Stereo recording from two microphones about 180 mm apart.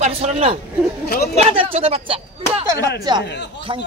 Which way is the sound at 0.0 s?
35° right (ahead or behind).